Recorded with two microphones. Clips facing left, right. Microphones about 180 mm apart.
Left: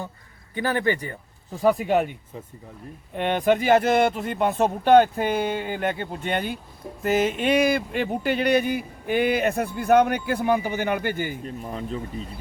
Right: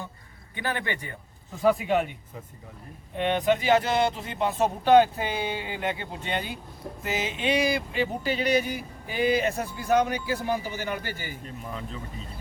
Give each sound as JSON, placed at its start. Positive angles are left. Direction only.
{"t": 0.5, "sound": "a man's voice", "side_deg": 40}
{"t": 3.2, "sound": "speech", "side_deg": 50}
{"t": 11.6, "sound": "a man's voice", "side_deg": 35}